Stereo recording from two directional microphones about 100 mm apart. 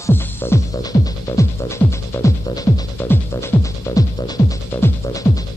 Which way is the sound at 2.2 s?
35° left (ahead or behind).